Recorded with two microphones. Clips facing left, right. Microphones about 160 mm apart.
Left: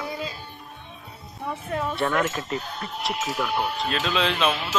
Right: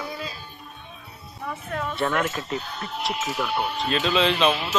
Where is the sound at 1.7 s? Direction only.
20° left (ahead or behind).